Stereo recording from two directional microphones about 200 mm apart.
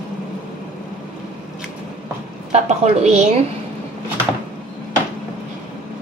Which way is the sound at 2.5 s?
35° right (ahead or behind).